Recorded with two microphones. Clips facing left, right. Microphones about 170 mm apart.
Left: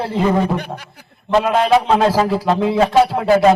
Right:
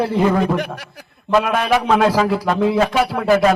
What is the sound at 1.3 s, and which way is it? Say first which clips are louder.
A man's voice: left 3 dB; 25° left (ahead or behind).